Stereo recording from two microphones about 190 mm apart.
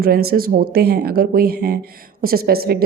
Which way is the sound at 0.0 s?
55° right (ahead or behind).